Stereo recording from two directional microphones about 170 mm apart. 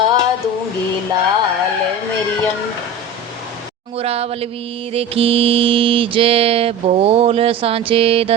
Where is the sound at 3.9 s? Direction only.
35° right (ahead or behind).